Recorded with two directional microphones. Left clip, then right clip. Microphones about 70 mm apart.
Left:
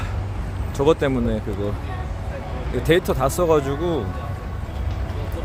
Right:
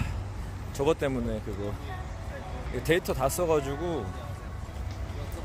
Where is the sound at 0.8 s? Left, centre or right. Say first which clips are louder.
Left 8 dB; centre.